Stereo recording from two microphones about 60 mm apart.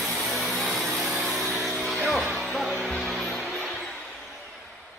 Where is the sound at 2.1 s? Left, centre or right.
Centre.